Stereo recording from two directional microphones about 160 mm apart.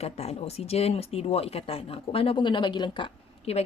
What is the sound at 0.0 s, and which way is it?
Speech, 40° left (ahead or behind).